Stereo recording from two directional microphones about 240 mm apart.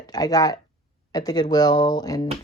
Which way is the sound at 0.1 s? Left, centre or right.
Centre.